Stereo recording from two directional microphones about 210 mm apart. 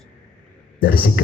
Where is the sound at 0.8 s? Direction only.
45° left (ahead or behind).